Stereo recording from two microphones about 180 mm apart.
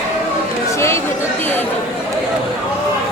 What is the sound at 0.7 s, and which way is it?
Chatter, 15° left (ahead or behind).